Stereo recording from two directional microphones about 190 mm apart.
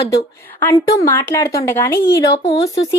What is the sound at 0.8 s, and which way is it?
Speech, 20° left (ahead or behind).